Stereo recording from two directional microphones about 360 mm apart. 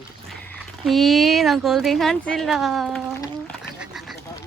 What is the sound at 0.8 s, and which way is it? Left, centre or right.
Speech, centre.